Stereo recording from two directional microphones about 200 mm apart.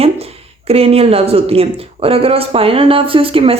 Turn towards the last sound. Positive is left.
turn(degrees=-25)  # may be behind; listen again after turning